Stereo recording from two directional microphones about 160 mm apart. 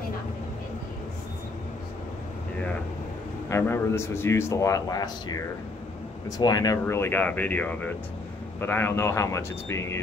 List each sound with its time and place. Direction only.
3.4 s a man's voice: 15° left (ahead or behind)